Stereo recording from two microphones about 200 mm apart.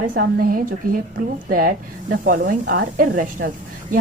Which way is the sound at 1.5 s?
45° right (ahead or behind).